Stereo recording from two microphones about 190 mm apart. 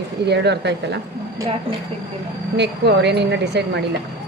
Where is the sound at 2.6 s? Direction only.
60° right (ahead or behind).